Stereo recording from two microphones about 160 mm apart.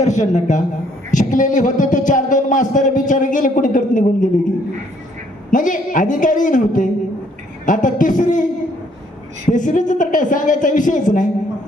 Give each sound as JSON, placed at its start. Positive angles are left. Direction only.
{"t": 0.0, "sound": "a man's voice", "side_deg": 50}
{"t": 5.5, "sound": "a man's voice", "side_deg": 55}
{"t": 9.5, "sound": "a man's voice", "side_deg": 55}